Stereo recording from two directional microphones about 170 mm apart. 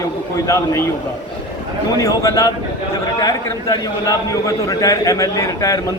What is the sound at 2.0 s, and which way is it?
A man's voice, 20° left (ahead or behind).